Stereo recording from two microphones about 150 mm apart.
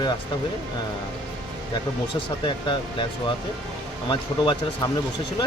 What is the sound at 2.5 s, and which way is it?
Speech, 30° left (ahead or behind).